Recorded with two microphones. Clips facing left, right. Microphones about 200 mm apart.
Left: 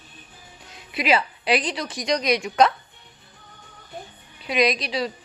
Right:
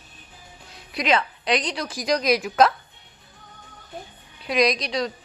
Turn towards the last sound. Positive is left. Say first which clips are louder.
# even
turn(degrees=5)  # may be behind; listen again after turning